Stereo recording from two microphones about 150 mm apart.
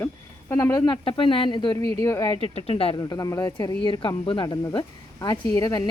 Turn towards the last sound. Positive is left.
turn(degrees=25)  # may be behind; listen again after turning